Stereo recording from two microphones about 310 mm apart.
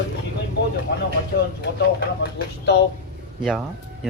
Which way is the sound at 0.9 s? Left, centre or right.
Left.